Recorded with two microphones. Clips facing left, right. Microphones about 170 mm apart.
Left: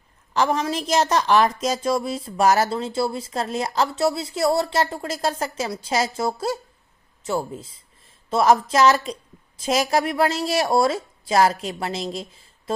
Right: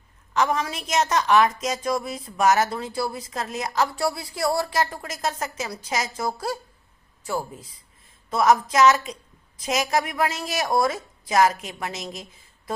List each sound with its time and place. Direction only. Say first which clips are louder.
0.3 s a woman's voice: left 2 dB; 30° left (ahead or behind)